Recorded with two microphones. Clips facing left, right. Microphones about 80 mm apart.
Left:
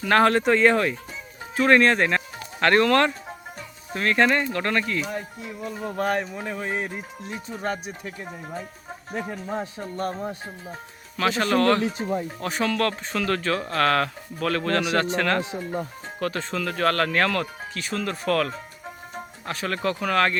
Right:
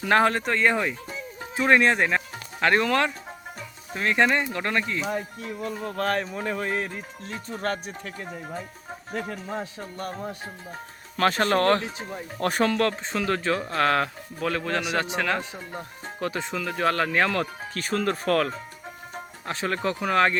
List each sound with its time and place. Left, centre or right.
0.0 s speech: centre
0.3 s speech: centre
1.5 s speech: centre
4.9 s speech: centre
5.8 s speech: centre
6.8 s speech: centre
9.1 s speech: left
11.2 s speech: right
12.4 s speech: right
12.7 s speech: right
17.7 s speech: right